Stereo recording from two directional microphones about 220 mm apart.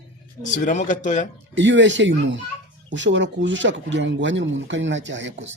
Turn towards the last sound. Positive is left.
turn(degrees=-55)  # may be behind; listen again after turning